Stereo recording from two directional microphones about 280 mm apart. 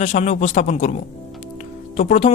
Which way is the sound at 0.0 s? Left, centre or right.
Left.